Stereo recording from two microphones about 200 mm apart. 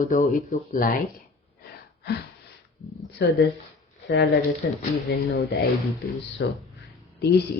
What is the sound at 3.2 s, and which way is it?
Speech, 55° left (ahead or behind).